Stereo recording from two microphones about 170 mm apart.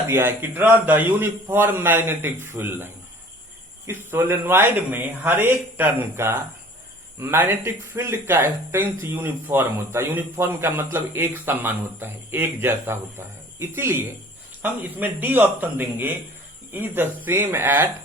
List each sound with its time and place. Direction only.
0.1 s speech: 15° right (ahead or behind)